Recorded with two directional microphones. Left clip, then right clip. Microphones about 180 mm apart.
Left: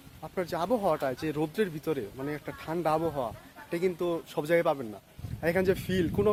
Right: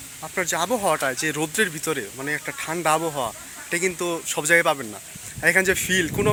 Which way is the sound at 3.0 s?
25° right (ahead or behind).